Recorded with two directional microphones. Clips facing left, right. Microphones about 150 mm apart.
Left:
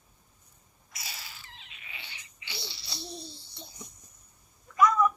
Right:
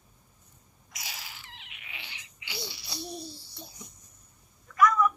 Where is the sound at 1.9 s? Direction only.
15° right (ahead or behind).